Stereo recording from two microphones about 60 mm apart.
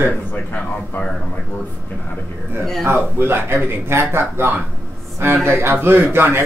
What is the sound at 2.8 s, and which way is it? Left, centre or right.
Speech, right.